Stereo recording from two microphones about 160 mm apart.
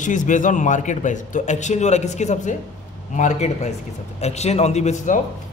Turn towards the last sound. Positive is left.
turn(degrees=50)  # may be behind; listen again after turning